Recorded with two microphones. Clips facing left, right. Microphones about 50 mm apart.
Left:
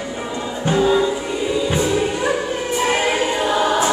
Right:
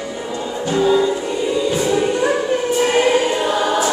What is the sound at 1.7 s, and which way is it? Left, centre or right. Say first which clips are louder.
Music: right 1 dB; left.